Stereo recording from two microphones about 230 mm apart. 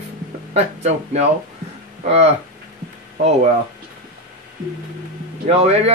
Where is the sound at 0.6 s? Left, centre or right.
Right.